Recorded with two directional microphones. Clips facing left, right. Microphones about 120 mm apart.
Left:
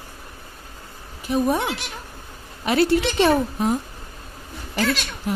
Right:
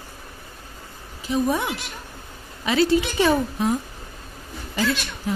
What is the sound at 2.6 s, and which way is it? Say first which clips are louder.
Speech: left 1 dB; 60° left (ahead or behind).